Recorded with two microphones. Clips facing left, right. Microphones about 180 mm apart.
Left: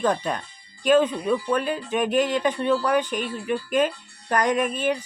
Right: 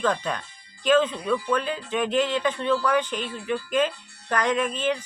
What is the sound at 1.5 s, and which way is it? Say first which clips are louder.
Speech: left 2 dB; 45° left (ahead or behind).